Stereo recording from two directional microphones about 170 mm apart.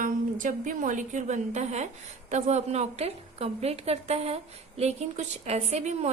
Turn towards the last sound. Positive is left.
turn(degrees=-40)  # may be behind; listen again after turning